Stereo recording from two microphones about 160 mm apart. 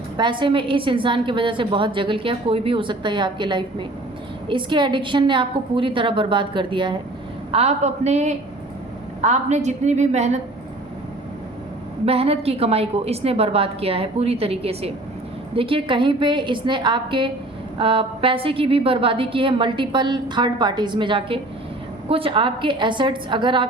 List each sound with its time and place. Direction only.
0.2 s a woman's voice: 30° right (ahead or behind)
7.5 s a woman's voice: 40° right (ahead or behind)
12.0 s a woman's voice: 40° right (ahead or behind)